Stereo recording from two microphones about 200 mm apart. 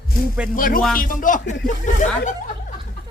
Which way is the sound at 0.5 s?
45° left (ahead or behind).